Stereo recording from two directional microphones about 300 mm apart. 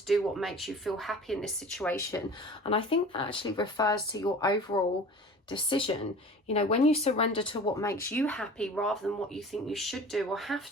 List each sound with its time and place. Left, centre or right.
0.1 s speech: centre